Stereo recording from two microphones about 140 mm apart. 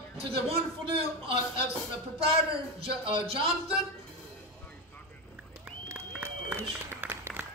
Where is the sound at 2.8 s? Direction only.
40° right (ahead or behind).